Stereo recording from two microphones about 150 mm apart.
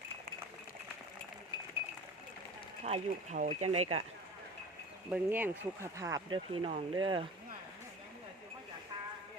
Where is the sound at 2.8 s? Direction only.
45° right (ahead or behind).